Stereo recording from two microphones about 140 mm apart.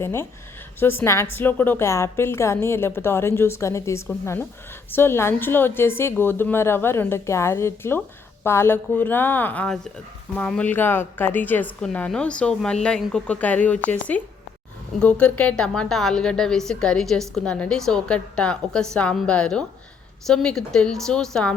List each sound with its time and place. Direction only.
0.0 s a woman's voice: 20° left (ahead or behind)